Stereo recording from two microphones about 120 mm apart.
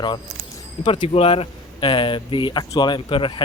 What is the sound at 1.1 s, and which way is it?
Speech, 55° left (ahead or behind).